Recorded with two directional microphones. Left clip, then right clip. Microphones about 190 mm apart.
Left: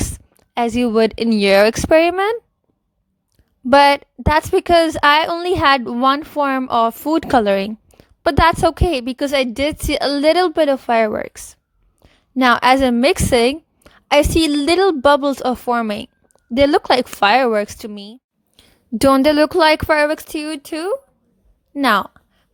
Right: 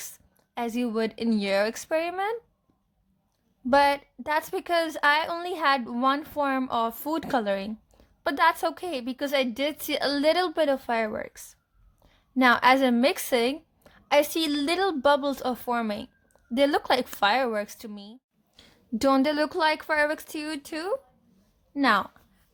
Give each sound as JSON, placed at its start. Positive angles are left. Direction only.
{"t": 0.0, "sound": "speech", "side_deg": 40}
{"t": 3.7, "sound": "a woman's voice", "side_deg": 40}